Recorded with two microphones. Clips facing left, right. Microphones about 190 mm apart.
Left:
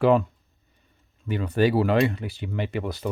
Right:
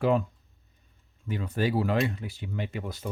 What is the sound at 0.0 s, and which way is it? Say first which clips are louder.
Speech: left 5 dB; 70° left (ahead or behind).